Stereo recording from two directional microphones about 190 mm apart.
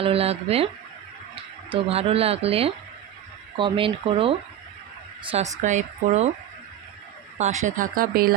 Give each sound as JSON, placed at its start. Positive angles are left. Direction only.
{"t": 0.0, "sound": "speech", "side_deg": -30}
{"t": 1.7, "sound": "speech", "side_deg": -30}
{"t": 7.3, "sound": "speech", "side_deg": -40}